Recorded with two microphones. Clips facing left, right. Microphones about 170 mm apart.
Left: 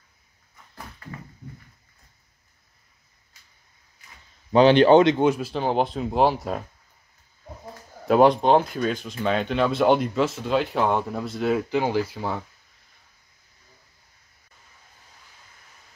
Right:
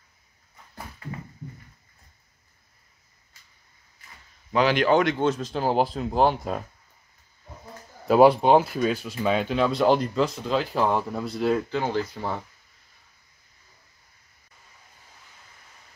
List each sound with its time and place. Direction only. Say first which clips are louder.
4.5 s speech: left 6 dB; 30° left (ahead or behind); by 5.6 s 10° left (ahead or behind)
5.6 s speech: even; 5° right (ahead or behind)
8.1 s speech: right 1 dB; 5° right (ahead or behind)
11.7 s speech: left 3 dB; 10° left (ahead or behind)